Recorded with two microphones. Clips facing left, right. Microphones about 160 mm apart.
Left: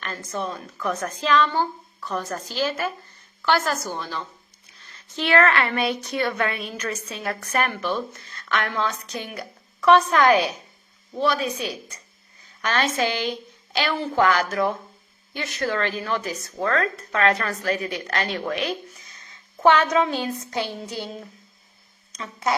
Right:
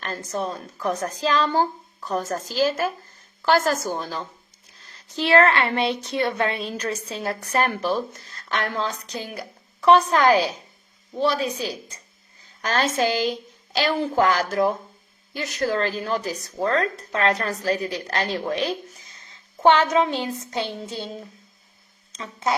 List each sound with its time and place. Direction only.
0.0 s a woman's voice: 35° right (ahead or behind)
5.2 s a woman's voice: 30° right (ahead or behind)
18.9 s a sound: 30° right (ahead or behind)
20.5 s a woman's voice: 20° right (ahead or behind)
22.1 s speech: 25° right (ahead or behind)